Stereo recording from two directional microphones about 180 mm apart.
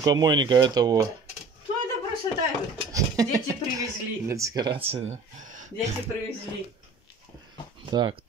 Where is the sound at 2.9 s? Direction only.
20° right (ahead or behind); by 5.9 s 45° right (ahead or behind).